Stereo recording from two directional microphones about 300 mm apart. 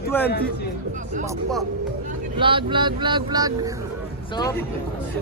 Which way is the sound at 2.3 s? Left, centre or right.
Centre.